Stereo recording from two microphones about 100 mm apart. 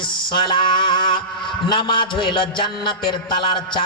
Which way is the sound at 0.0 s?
55° left (ahead or behind).